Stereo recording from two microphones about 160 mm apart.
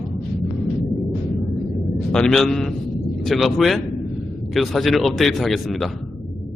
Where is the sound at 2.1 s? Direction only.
5° left (ahead or behind).